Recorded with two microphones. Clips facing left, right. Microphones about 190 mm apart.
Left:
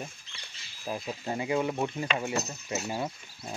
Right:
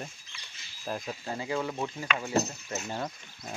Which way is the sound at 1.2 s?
20° left (ahead or behind).